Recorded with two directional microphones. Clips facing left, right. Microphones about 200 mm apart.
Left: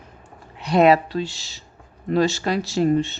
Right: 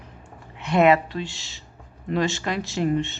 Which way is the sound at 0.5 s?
35° left (ahead or behind).